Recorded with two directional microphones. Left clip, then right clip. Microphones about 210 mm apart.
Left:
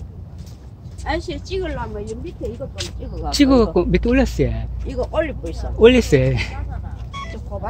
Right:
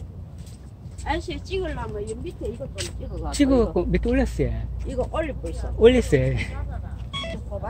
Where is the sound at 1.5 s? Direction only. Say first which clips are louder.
Left 3 dB; 30° left (ahead or behind).